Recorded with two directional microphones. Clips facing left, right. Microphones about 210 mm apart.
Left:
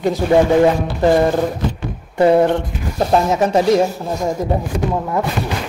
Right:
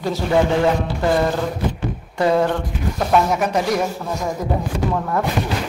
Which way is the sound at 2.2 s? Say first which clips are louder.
Left 5 dB; 25° left (ahead or behind).